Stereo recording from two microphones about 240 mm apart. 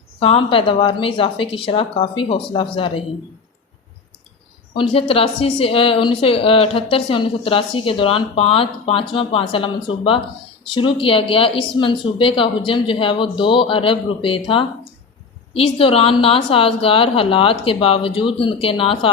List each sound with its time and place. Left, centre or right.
0.2 s speech: left
4.7 s speech: left